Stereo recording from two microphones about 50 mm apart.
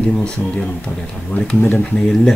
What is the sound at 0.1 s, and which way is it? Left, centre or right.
Speech, centre.